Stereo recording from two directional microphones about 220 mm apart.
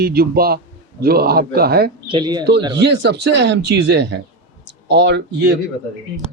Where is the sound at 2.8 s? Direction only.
50° right (ahead or behind).